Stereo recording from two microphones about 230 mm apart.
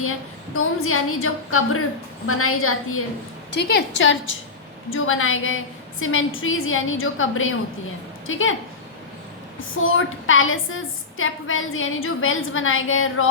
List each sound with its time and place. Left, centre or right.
0.0 s a woman's voice: left
3.5 s a woman's voice: left
4.9 s a woman's voice: left
9.7 s a woman's voice: left